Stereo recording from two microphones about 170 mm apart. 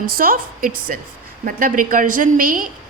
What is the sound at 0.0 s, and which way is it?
A woman's voice, 60° right (ahead or behind).